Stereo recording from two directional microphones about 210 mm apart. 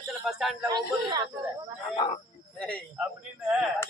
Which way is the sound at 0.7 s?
20° right (ahead or behind).